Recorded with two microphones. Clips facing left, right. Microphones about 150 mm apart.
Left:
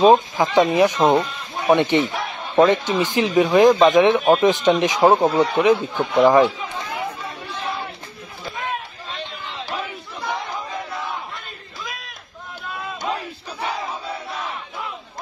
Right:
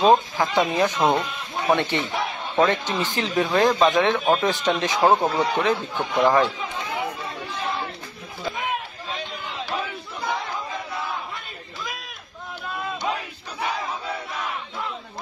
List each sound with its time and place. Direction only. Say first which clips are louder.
0.0 s speech: left 4 dB; 15° left (ahead or behind)
11.8 s a sound: even; centre (ahead or behind)
13.7 s battle cry: left 1 dB; 30° left (ahead or behind)